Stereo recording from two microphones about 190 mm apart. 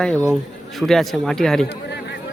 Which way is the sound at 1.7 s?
65° left (ahead or behind).